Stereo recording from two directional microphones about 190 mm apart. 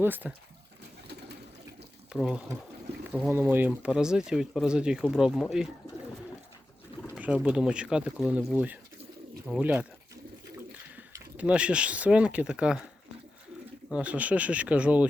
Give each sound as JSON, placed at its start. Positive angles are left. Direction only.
{"t": 0.0, "sound": "speech", "side_deg": -10}
{"t": 1.0, "sound": "pigeon", "side_deg": -60}
{"t": 2.1, "sound": "speech", "side_deg": -5}
{"t": 7.1, "sound": "speech", "side_deg": -5}
{"t": 10.9, "sound": "speech", "side_deg": -10}
{"t": 13.9, "sound": "speech", "side_deg": -5}